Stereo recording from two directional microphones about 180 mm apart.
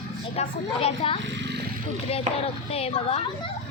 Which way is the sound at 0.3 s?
35° left (ahead or behind).